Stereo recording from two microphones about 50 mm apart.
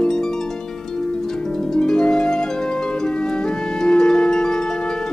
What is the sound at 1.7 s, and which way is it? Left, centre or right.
Harp, centre.